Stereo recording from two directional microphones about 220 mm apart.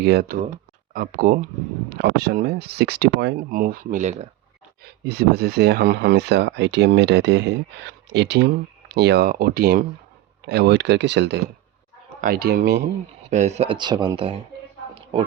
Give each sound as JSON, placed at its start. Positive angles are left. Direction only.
{"t": 0.0, "sound": "speech", "side_deg": -45}
{"t": 4.8, "sound": "speech", "side_deg": -45}
{"t": 12.2, "sound": "speech", "side_deg": -40}
{"t": 13.3, "sound": "speech", "side_deg": -30}
{"t": 14.9, "sound": "a sound", "side_deg": -25}